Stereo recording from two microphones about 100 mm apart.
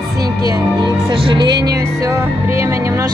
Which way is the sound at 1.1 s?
60° right (ahead or behind).